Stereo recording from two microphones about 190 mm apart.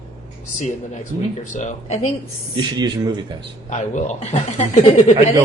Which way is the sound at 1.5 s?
40° left (ahead or behind).